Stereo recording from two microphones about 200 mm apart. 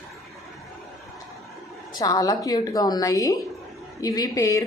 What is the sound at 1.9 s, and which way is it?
A woman's voice, 20° left (ahead or behind).